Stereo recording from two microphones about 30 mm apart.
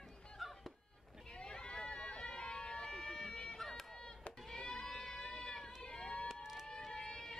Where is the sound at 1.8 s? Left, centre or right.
Left.